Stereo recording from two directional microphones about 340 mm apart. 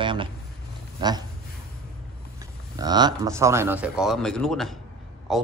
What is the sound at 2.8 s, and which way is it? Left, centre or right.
A man's voice, centre.